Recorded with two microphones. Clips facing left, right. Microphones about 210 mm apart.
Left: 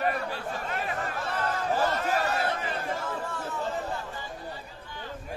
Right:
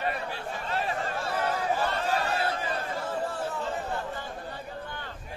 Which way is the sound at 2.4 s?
25° right (ahead or behind).